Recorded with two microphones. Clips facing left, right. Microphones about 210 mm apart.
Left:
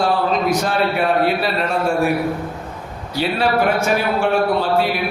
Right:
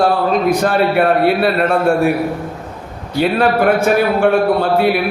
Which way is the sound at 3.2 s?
55° right (ahead or behind).